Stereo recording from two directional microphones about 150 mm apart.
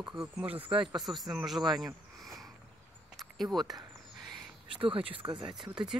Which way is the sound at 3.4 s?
Centre (ahead or behind).